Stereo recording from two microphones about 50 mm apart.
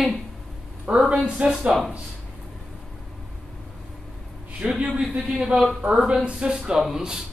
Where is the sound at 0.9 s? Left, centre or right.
Right.